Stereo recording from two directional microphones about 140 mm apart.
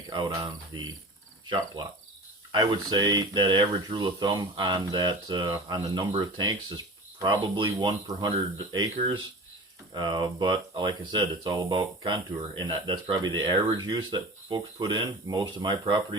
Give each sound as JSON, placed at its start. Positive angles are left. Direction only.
{"t": 1.5, "sound": "speech", "side_deg": -35}